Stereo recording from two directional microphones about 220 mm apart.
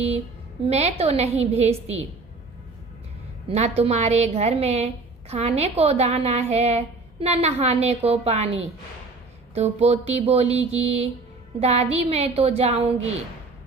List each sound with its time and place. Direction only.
0.6 s a woman's voice: 30° right (ahead or behind)
3.5 s a woman's voice: 30° right (ahead or behind)
9.6 s a woman's voice: 30° right (ahead or behind)